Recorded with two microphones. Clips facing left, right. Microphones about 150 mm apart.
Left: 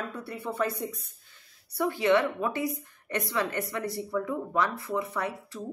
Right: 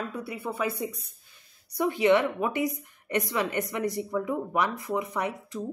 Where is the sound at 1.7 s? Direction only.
15° right (ahead or behind).